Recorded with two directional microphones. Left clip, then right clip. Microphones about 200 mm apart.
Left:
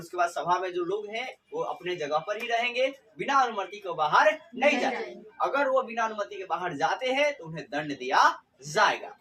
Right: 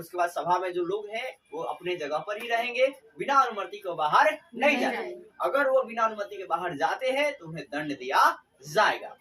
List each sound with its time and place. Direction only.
0.2 s a man's voice: 15° left (ahead or behind)